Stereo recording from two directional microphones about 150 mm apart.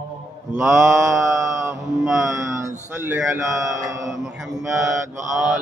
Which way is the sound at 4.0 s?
5° right (ahead or behind).